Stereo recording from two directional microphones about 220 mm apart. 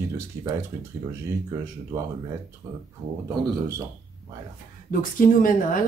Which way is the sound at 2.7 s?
15° right (ahead or behind).